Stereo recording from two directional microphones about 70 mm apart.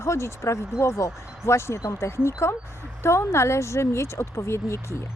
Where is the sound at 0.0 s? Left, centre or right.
Left.